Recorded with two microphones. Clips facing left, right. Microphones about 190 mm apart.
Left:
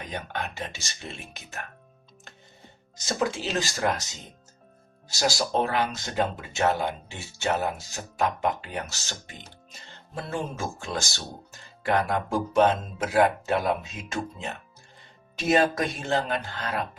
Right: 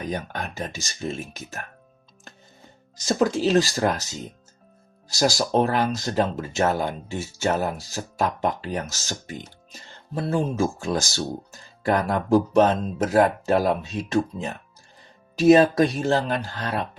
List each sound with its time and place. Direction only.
0.0 s speech: 40° right (ahead or behind)
3.2 s speech: 40° right (ahead or behind)
5.0 s speech: 40° right (ahead or behind)